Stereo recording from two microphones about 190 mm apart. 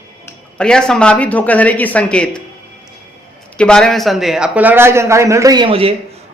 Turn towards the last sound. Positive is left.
turn(degrees=-30)  # may be behind; listen again after turning